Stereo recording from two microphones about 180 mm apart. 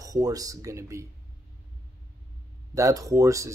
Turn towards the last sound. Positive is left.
turn(degrees=-15)  # may be behind; listen again after turning